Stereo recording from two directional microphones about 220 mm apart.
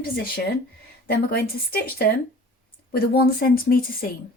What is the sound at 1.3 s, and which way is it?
Speech, 45° left (ahead or behind).